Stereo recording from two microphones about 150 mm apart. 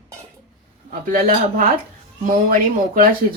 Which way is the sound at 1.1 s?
65° right (ahead or behind).